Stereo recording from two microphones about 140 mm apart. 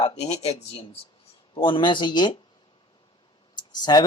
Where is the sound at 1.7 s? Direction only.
35° left (ahead or behind).